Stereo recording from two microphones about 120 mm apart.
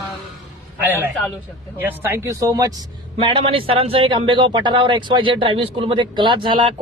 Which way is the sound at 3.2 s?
45° right (ahead or behind).